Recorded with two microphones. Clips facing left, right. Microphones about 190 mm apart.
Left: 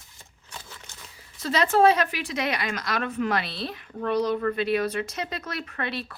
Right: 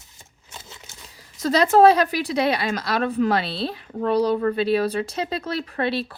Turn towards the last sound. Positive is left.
turn(degrees=-30)  # may be behind; listen again after turning